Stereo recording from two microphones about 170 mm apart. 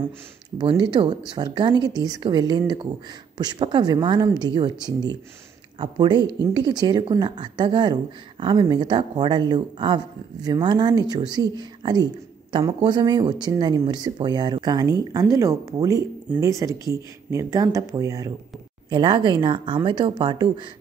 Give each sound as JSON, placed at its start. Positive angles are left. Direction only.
{"t": 0.6, "sound": "a woman's voice", "side_deg": -30}